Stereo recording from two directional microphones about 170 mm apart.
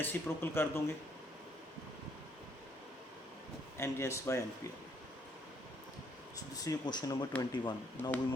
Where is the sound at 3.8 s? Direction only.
15° left (ahead or behind).